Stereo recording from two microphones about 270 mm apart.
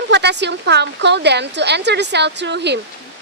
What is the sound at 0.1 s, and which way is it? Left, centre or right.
A woman's voice, right.